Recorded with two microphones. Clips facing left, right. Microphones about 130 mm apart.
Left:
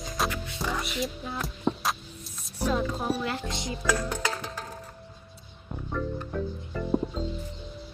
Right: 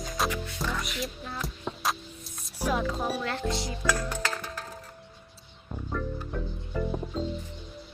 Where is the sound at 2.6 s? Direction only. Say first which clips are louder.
Left 1 dB; 10° right (ahead or behind).